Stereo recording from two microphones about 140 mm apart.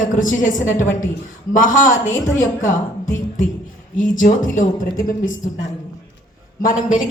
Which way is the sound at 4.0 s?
70° left (ahead or behind).